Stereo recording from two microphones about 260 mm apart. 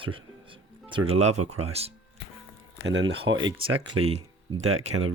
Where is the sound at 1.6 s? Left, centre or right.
Right.